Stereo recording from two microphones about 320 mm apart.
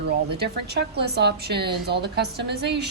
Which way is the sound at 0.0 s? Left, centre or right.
Right.